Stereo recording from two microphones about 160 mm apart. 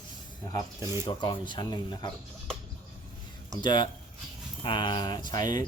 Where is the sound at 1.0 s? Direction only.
30° left (ahead or behind).